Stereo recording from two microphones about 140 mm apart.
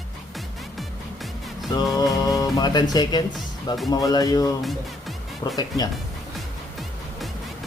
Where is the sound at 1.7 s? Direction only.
25° left (ahead or behind).